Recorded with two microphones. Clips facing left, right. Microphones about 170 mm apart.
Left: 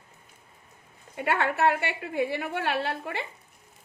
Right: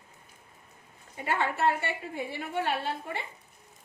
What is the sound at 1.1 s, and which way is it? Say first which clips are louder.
A woman's voice: left 3 dB; 70° left (ahead or behind).